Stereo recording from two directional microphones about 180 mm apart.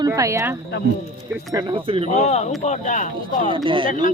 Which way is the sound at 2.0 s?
40° left (ahead or behind).